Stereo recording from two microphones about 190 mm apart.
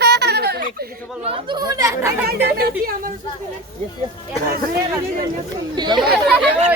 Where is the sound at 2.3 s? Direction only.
55° right (ahead or behind).